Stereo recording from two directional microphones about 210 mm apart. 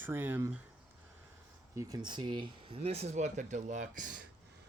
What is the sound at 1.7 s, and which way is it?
Speech, 20° right (ahead or behind).